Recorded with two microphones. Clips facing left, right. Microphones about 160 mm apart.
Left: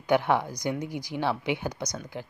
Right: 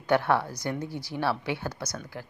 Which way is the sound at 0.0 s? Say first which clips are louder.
Even; 15° left (ahead or behind).